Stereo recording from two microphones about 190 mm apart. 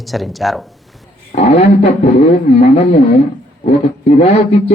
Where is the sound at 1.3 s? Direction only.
30° left (ahead or behind).